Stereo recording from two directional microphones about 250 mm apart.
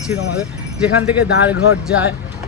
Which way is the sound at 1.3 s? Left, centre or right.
Left.